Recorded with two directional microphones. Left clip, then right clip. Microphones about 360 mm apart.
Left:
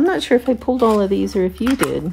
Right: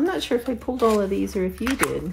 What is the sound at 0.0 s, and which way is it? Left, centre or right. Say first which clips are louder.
A woman's voice: left 7 dB; left.